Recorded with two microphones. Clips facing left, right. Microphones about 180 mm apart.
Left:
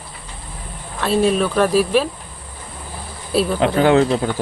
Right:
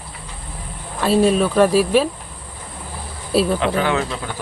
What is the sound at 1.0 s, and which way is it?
Speech, centre (ahead or behind).